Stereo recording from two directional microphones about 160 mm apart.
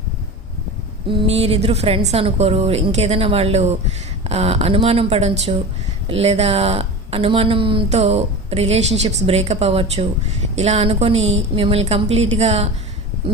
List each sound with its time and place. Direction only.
1.0 s speech: 35° right (ahead or behind)